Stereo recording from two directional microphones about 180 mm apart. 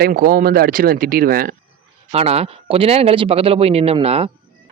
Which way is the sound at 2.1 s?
35° right (ahead or behind).